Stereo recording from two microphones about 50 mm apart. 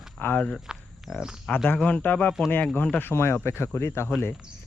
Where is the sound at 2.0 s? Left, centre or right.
Left.